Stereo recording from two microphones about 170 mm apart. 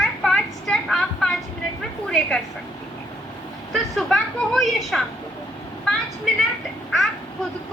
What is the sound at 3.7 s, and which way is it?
A woman's voice, centre (ahead or behind).